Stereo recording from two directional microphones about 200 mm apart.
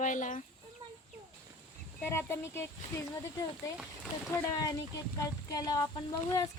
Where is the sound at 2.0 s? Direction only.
10° left (ahead or behind).